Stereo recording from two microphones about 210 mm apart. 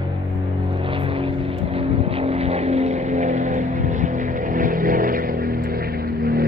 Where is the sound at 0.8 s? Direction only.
25° right (ahead or behind).